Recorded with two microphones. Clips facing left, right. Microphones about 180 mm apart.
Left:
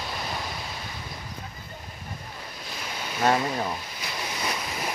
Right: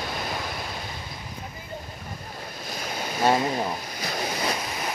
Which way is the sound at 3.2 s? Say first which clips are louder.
Right 1 dB; 15° right (ahead or behind).